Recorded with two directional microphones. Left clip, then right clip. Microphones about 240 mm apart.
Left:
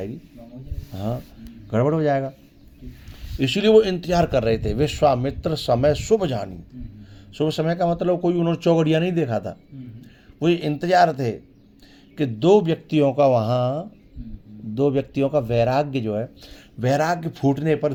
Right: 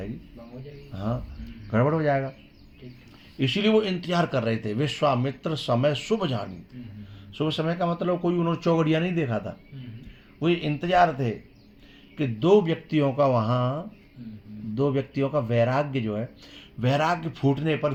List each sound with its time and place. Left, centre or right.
0.9 s speech: left
3.3 s a man's voice: left